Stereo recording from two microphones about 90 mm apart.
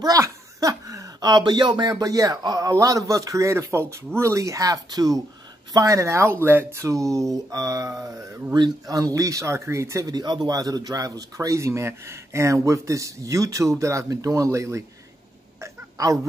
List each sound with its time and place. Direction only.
0.0 s speech: 40° right (ahead or behind)
10.1 s speech: 50° right (ahead or behind); by 14.9 s 35° right (ahead or behind)
15.6 s a sound: 40° right (ahead or behind)